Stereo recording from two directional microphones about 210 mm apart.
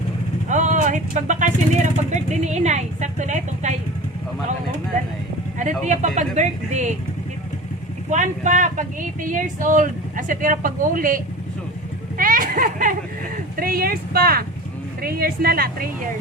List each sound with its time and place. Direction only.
0.4 s a sound: 35° right (ahead or behind)
2.3 s a woman's voice: 35° right (ahead or behind)
5.5 s speech: 35° right (ahead or behind)
8.1 s speech: 35° right (ahead or behind)
12.1 s a sound: 40° right (ahead or behind)
13.6 s a woman's voice: 45° right (ahead or behind)